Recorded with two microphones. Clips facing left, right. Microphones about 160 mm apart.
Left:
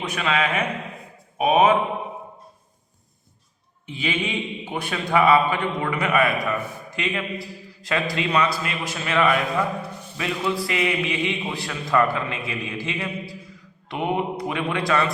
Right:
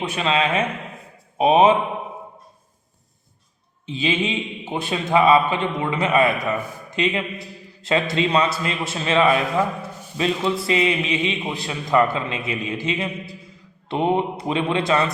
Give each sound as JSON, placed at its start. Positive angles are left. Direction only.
{"t": 0.0, "sound": "a man's voice", "side_deg": -25}
{"t": 3.8, "sound": "a man's voice", "side_deg": -25}